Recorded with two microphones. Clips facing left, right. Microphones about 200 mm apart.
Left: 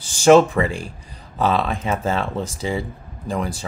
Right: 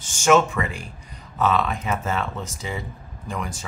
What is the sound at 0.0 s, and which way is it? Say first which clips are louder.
Speech: left 6 dB; 35° left (ahead or behind).